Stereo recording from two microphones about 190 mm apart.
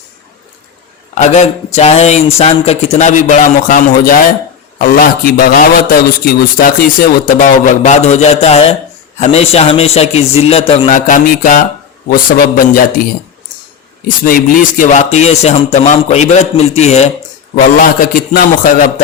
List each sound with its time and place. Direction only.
1.1 s a man's voice: 35° left (ahead or behind)
14.3 s speech: 50° left (ahead or behind)
18.0 s a man's voice: 50° left (ahead or behind)